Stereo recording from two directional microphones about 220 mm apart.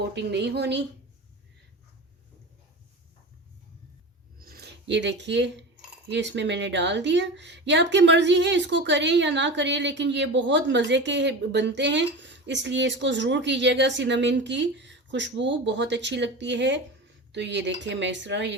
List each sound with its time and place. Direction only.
0.0 s speech: 50° right (ahead or behind)
4.4 s a sound: 45° right (ahead or behind)
6.1 s speech: 55° right (ahead or behind)